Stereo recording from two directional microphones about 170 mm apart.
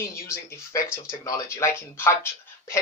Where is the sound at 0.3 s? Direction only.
15° left (ahead or behind).